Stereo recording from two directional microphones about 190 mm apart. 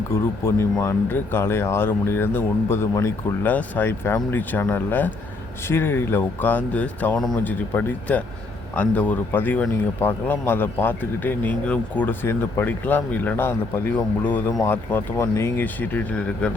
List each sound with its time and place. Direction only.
0.1 s speech: 15° left (ahead or behind)